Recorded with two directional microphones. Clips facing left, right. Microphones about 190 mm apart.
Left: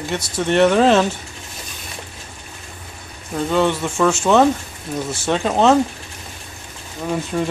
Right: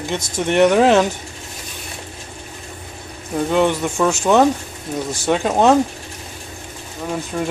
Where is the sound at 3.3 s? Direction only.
15° right (ahead or behind).